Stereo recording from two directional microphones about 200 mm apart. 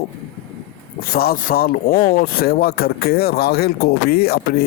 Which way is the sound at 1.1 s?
50° left (ahead or behind).